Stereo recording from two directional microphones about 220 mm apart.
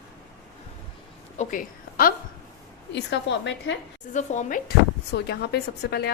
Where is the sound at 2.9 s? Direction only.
50° left (ahead or behind).